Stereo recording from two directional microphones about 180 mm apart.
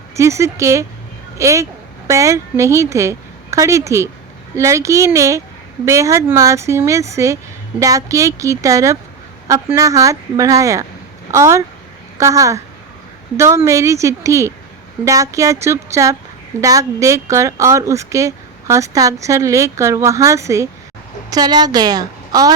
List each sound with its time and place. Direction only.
0.2 s a woman's voice: 15° right (ahead or behind)